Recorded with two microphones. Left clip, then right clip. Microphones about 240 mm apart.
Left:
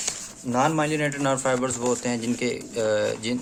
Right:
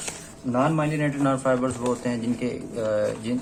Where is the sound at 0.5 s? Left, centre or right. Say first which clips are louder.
Left 1 dB; left.